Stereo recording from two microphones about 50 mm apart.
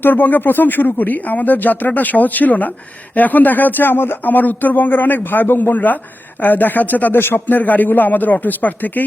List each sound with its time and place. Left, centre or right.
0.0 s speech: left
7.2 s speech: left